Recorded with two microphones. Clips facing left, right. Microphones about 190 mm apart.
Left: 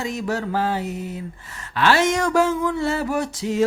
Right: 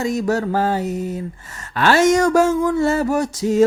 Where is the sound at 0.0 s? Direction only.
40° right (ahead or behind).